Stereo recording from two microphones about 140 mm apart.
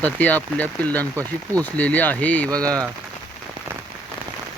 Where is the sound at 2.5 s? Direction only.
25° right (ahead or behind).